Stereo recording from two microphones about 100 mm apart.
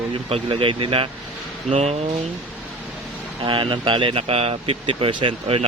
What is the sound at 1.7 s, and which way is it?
Speech, 90° right.